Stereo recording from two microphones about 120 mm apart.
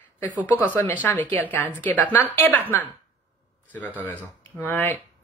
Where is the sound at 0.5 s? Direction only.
15° left (ahead or behind).